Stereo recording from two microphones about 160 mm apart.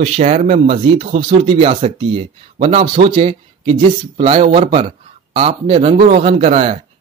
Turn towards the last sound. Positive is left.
turn(degrees=-40)  # may be behind; listen again after turning